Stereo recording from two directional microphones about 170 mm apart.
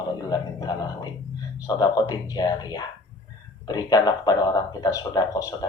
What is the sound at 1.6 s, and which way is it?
A man's voice, 20° left (ahead or behind).